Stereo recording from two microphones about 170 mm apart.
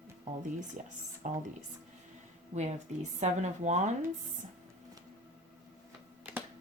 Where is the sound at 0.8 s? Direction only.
45° right (ahead or behind).